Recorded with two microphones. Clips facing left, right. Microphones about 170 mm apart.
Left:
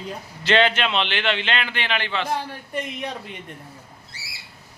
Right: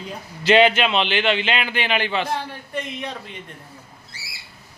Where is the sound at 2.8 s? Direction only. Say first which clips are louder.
Even; 15° left (ahead or behind).